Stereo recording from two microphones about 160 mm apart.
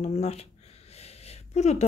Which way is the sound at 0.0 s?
40° left (ahead or behind).